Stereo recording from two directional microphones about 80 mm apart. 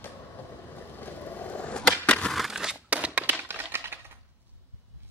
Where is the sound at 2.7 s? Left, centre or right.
Centre.